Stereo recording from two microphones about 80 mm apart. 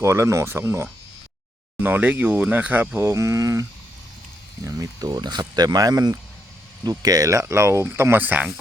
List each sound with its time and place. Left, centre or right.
0.0 s speech: right
1.8 s speech: right
3.0 s speech: right